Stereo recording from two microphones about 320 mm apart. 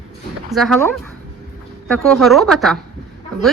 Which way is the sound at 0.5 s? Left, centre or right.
Centre.